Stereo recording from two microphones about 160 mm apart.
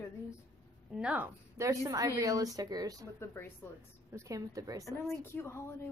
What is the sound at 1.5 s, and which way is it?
A woman's voice, 20° right (ahead or behind).